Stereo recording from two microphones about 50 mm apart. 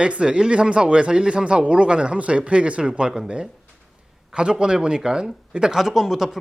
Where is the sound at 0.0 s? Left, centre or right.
Right.